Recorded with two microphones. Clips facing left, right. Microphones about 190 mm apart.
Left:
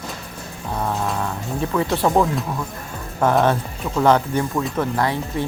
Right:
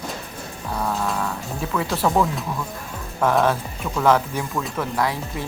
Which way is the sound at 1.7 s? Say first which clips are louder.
Left 3 dB; 20° left (ahead or behind).